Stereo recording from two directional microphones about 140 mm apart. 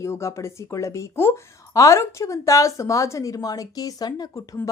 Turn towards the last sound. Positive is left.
turn(degrees=25)  # may be behind; listen again after turning